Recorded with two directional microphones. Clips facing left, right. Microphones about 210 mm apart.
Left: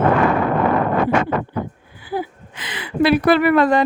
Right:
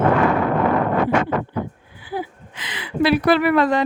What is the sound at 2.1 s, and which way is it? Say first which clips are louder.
Speech: left 3 dB; 45° left (ahead or behind).